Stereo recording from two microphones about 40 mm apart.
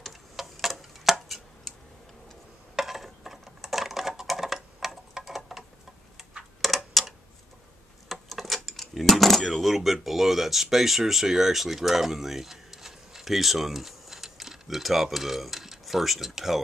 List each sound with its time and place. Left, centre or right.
0.4 s tick-tock: centre
1.1 s chopping: centre
2.7 s typing: centre
6.6 s a sound: centre
8.1 s speech: centre